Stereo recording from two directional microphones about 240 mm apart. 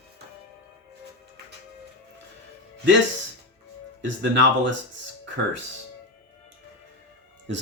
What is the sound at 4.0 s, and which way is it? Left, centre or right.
Speech, right.